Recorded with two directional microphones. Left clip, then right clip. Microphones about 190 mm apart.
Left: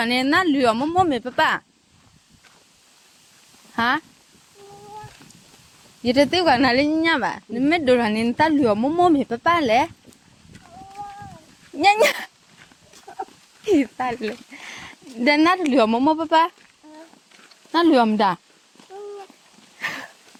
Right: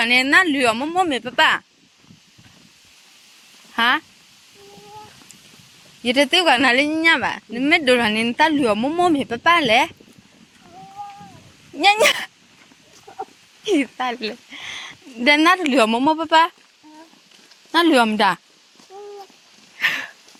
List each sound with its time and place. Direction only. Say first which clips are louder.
0.0 s speech: right 4 dB; 15° left (ahead or behind)
3.8 s speech: right 3 dB; 15° left (ahead or behind)
6.0 s speech: right 2 dB; 15° left (ahead or behind)
11.8 s speech: right 1 dB; 10° left (ahead or behind)
13.7 s speech: even; 10° left (ahead or behind)
17.7 s speech: right 1 dB; 10° left (ahead or behind)
19.8 s a sound: right 8 dB; 10° left (ahead or behind)